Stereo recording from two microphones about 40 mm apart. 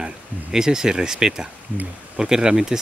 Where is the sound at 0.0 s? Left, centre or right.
Centre.